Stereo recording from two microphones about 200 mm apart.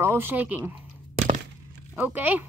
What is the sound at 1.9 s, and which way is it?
Speech, 10° right (ahead or behind).